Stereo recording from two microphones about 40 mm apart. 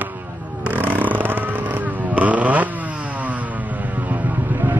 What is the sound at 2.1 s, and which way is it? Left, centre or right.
Vehicle, right.